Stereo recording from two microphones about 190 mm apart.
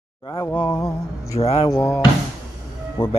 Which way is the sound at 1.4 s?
30° left (ahead or behind).